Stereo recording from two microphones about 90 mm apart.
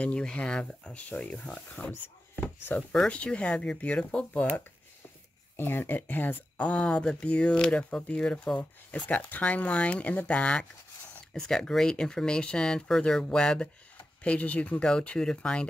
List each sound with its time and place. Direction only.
0.0 s speech: 10° left (ahead or behind)
1.9 s a sound: 25° left (ahead or behind)
2.9 s speech: 10° left (ahead or behind)
5.6 s speech: 25° left (ahead or behind)